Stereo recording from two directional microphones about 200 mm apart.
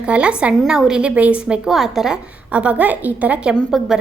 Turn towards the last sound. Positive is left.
turn(degrees=0)  # may be behind; listen again after turning